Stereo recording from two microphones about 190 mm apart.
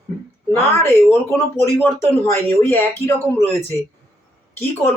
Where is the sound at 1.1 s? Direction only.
15° left (ahead or behind).